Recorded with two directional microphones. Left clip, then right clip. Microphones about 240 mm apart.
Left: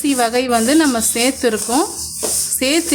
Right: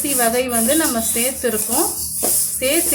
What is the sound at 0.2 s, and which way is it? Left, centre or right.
Speech, left.